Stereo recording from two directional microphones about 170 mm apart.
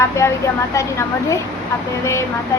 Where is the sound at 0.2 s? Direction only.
15° left (ahead or behind).